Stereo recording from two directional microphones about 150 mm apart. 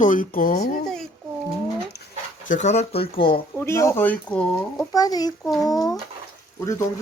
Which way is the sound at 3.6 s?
20° left (ahead or behind).